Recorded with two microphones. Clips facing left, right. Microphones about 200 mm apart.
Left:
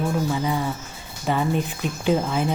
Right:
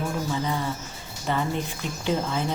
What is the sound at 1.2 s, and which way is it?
Speech, 15° left (ahead or behind).